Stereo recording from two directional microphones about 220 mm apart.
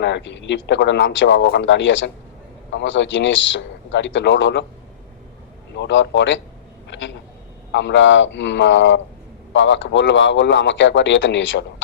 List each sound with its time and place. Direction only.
0.0 s a man's voice: 55° left (ahead or behind)
5.7 s a man's voice: 55° left (ahead or behind)